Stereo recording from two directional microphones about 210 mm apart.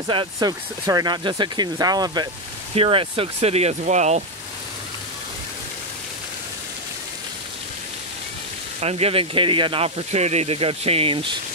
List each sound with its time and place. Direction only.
0.1 s speech: 20° right (ahead or behind)
8.8 s speech: 30° right (ahead or behind)